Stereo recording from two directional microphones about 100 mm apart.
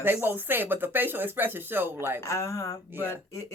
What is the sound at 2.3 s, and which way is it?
Speech, 30° left (ahead or behind).